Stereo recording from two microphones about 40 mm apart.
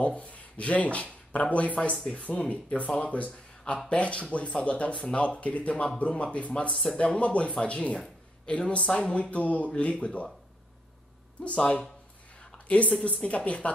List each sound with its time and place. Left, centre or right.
0.0 s speech: left
11.4 s speech: left